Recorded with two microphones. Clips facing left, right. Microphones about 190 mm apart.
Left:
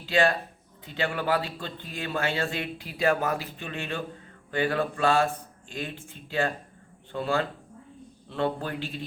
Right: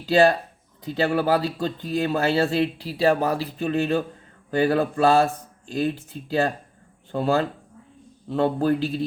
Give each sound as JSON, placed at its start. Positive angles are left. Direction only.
{"t": 0.0, "sound": "a man's voice", "side_deg": -35}